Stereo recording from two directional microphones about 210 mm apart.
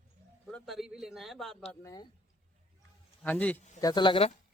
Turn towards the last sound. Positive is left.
turn(degrees=25)  # may be behind; listen again after turning